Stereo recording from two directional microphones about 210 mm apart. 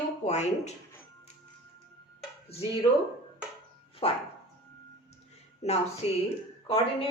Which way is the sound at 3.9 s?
25° left (ahead or behind).